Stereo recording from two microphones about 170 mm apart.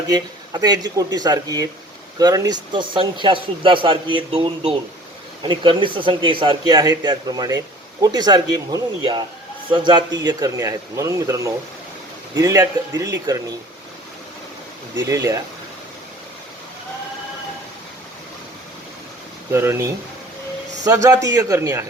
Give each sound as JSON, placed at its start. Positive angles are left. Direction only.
{"t": 0.1, "sound": "a man's voice", "side_deg": -25}
{"t": 14.9, "sound": "a man's voice", "side_deg": -20}
{"t": 19.5, "sound": "a man's voice", "side_deg": -15}